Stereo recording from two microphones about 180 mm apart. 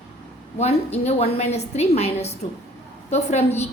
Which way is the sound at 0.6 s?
35° left (ahead or behind).